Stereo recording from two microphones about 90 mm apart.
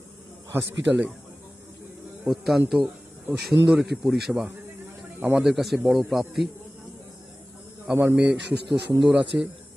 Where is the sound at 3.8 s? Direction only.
Centre (ahead or behind).